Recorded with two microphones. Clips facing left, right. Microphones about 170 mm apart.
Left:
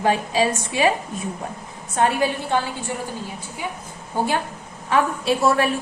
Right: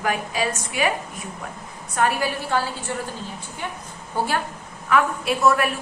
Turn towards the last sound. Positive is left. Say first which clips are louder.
# left 1 dB
turn(degrees=30)  # may be behind; listen again after turning